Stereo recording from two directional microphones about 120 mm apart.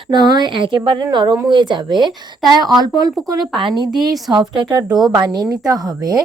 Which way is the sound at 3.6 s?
40° right (ahead or behind).